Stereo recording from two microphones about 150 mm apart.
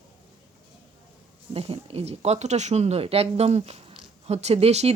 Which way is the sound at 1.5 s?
40° right (ahead or behind).